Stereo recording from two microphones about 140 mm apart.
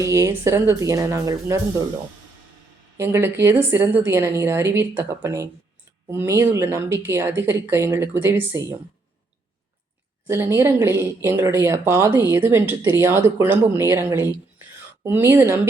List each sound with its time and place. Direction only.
0.0 s speech: 20° right (ahead or behind)
3.0 s speech: 20° right (ahead or behind)
10.2 s speech: 20° right (ahead or behind)